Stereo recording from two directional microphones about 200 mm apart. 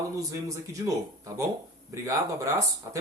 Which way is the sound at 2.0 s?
15° right (ahead or behind).